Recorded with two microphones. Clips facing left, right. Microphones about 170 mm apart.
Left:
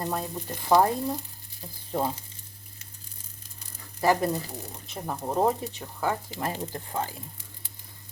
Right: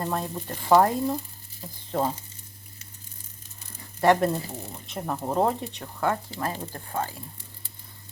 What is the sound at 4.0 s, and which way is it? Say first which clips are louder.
Speech: right 3 dB; centre (ahead or behind).